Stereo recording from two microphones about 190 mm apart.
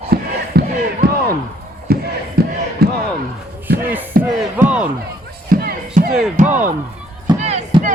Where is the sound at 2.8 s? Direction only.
55° right (ahead or behind).